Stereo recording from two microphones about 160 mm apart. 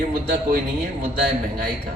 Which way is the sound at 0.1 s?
65° right (ahead or behind).